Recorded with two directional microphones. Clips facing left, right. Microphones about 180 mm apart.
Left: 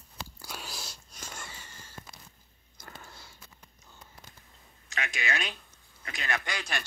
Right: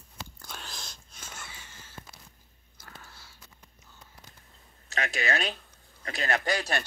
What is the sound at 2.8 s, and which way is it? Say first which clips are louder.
Biting: left 2 dB; 15° left (ahead or behind).